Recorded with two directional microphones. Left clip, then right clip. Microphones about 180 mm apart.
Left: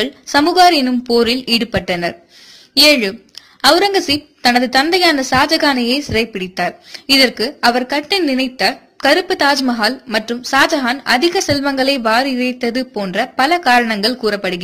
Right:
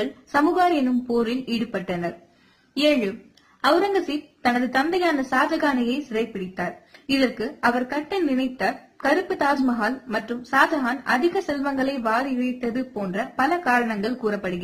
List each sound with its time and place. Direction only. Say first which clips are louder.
0.0 s a woman's voice: left 7 dB; 25° left (ahead or behind)
4.5 s a woman's voice: left 9 dB; 25° left (ahead or behind)